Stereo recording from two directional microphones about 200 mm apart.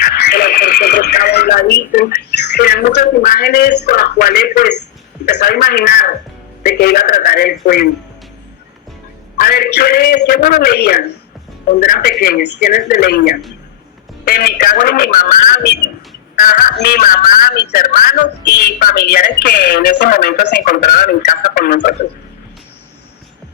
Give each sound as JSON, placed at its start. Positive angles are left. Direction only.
{"t": 0.1, "sound": "radio", "side_deg": 50}
{"t": 5.2, "sound": "speech", "side_deg": 50}
{"t": 9.4, "sound": "speech", "side_deg": 50}